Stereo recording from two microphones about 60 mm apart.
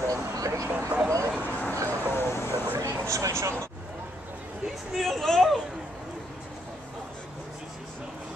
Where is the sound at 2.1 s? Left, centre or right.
Left.